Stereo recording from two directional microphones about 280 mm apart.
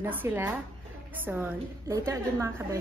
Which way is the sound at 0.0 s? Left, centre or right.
Centre.